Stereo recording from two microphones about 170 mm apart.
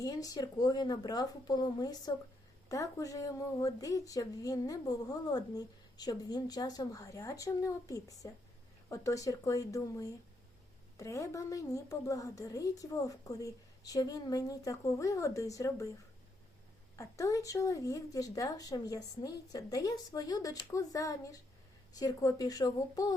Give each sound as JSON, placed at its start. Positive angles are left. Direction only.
{"t": 0.0, "sound": "speech", "side_deg": 20}
{"t": 17.0, "sound": "speech", "side_deg": 20}